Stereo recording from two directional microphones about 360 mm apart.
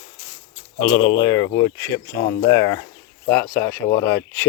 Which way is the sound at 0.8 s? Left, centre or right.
Centre.